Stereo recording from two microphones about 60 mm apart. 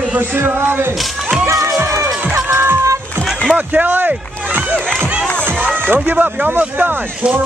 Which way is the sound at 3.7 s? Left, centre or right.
Right.